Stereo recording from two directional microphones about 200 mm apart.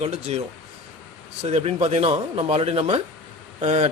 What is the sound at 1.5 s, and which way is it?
Speech, 30° right (ahead or behind).